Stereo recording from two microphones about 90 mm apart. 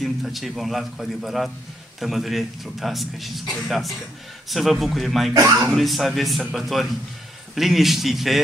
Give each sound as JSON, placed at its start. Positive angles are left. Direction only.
{"t": 0.0, "sound": "a man's voice", "side_deg": 0}
{"t": 5.3, "sound": "speech", "side_deg": -40}
{"t": 5.6, "sound": "a man's voice", "side_deg": -5}